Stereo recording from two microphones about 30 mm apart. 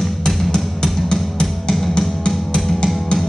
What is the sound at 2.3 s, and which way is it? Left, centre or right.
Music, left.